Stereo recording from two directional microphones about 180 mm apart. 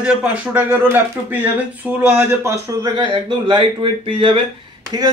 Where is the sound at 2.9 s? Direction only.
30° right (ahead or behind).